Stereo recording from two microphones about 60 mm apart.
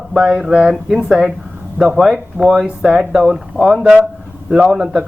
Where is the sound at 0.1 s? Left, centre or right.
Centre.